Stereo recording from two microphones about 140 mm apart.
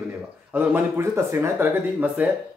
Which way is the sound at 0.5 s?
15° right (ahead or behind).